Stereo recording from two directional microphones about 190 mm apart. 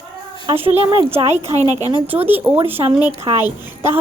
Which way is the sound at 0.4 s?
30° right (ahead or behind).